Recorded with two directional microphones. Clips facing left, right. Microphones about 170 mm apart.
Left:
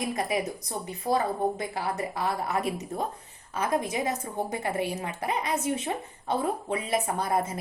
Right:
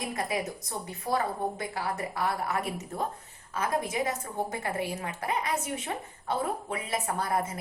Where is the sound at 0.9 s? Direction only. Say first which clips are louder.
Left 3 dB; 20° left (ahead or behind).